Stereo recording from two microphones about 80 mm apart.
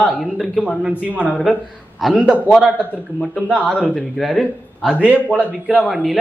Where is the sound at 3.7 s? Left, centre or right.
Centre.